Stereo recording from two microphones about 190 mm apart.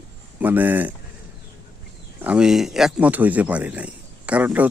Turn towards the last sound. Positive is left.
turn(degrees=-10)  # may be behind; listen again after turning